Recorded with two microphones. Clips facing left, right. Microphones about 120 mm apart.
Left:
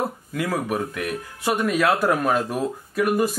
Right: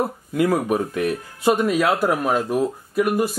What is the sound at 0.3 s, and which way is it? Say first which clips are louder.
Speech: right 8 dB; 20° right (ahead or behind).